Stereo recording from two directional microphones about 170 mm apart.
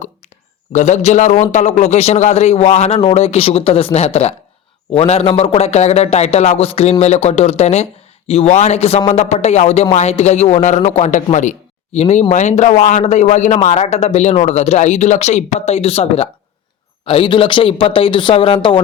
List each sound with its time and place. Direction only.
0.7 s a man's voice: 45° left (ahead or behind)